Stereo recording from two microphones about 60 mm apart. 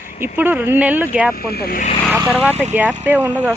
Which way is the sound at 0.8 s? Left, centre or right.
Right.